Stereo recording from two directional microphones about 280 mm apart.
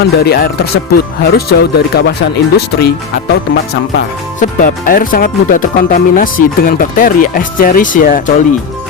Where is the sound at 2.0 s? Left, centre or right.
Left.